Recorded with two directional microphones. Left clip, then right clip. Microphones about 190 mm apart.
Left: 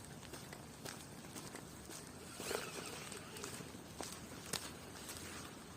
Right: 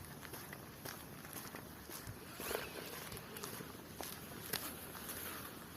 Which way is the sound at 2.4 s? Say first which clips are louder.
Even; 20° left (ahead or behind).